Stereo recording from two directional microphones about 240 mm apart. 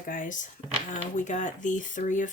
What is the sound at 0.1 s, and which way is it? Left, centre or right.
Speech, left.